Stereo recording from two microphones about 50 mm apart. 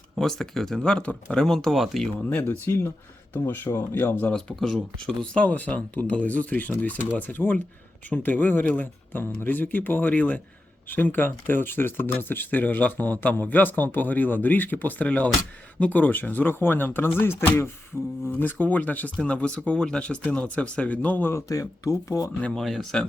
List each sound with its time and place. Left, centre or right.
0.2 s speech: centre
2.6 s speech: left
4.3 s speech: centre
5.5 s speech: left
9.1 s speech: left
17.9 s speech: centre
18.3 s speech: left
19.2 s speech: left
21.3 s speech: left
22.5 s speech: centre